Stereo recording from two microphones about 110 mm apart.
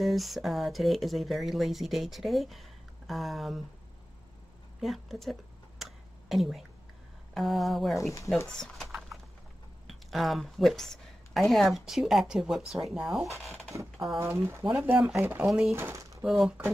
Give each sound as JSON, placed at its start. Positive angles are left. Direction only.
{"t": 0.0, "sound": "speech", "side_deg": 0}
{"t": 4.7, "sound": "a sound", "side_deg": 0}
{"t": 7.3, "sound": "speech", "side_deg": 0}
{"t": 8.5, "sound": "a sound", "side_deg": 5}
{"t": 9.8, "sound": "a woman's voice", "side_deg": 0}
{"t": 13.2, "sound": "speech", "side_deg": -25}
{"t": 15.4, "sound": "speech", "side_deg": -5}
{"t": 15.7, "sound": "speech", "side_deg": -25}
{"t": 16.3, "sound": "speech", "side_deg": 0}